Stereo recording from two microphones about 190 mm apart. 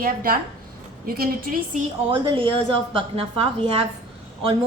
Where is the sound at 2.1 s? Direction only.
25° right (ahead or behind).